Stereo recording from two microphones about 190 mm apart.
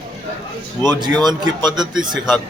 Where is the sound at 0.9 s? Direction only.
20° right (ahead or behind).